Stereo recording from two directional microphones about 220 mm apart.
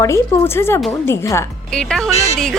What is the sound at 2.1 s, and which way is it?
Speech, 30° left (ahead or behind).